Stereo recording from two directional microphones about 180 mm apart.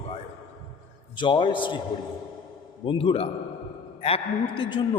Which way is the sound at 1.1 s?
25° left (ahead or behind).